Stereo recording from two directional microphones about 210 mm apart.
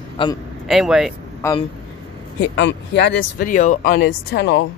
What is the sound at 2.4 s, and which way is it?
Speech, 55° left (ahead or behind).